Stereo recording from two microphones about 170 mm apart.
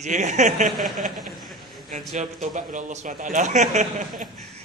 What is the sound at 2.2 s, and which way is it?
Speech, 50° right (ahead or behind).